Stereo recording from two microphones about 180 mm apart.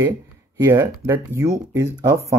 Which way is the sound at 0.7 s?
15° right (ahead or behind).